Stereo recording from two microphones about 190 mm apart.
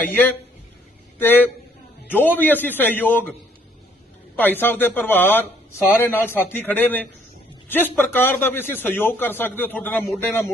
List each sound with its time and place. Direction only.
0.0 s a man's voice: 10° left (ahead or behind)
4.4 s a man's voice: 10° left (ahead or behind)